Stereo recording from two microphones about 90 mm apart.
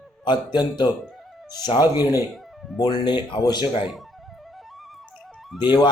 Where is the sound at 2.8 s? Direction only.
50° left (ahead or behind).